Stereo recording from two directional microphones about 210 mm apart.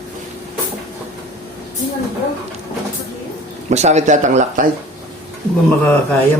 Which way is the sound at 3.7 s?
30° right (ahead or behind).